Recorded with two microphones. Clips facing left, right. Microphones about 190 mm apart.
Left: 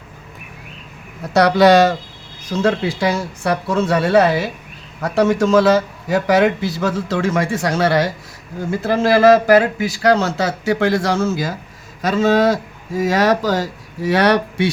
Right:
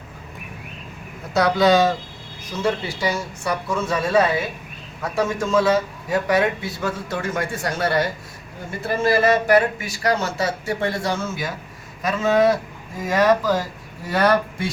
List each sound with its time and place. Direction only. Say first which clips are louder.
1.3 s speech: left 5 dB; 75° left (ahead or behind)